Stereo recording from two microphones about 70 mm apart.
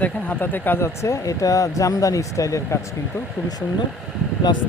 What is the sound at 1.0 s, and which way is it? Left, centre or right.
Speech, left.